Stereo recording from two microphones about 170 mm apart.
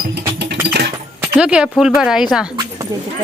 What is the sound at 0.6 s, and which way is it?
Keys jangling, 70° right (ahead or behind).